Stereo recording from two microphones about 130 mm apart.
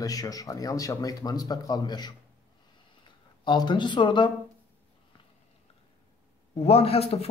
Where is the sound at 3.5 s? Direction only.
35° left (ahead or behind).